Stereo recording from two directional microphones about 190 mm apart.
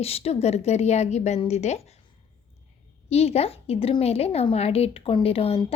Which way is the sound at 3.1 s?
35° left (ahead or behind).